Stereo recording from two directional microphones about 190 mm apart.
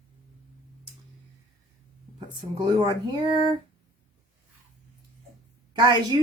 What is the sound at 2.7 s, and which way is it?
Speech, 20° right (ahead or behind).